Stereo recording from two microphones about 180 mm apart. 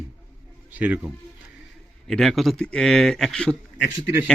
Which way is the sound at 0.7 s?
10° right (ahead or behind).